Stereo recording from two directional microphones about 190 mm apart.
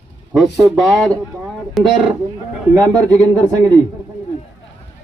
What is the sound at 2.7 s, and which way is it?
Speech, 15° right (ahead or behind).